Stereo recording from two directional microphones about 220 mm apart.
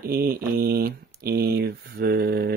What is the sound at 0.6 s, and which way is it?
Speech, 45° right (ahead or behind).